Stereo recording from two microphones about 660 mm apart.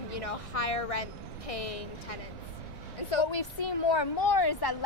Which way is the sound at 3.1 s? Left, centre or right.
Left.